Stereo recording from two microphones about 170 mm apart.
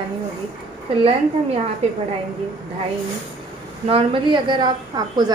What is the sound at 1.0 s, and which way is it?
Speech, 35° right (ahead or behind).